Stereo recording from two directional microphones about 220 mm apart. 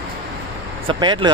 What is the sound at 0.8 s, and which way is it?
Speech, 20° right (ahead or behind).